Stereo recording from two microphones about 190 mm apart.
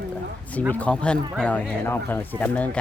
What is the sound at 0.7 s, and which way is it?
Speech, 5° left (ahead or behind).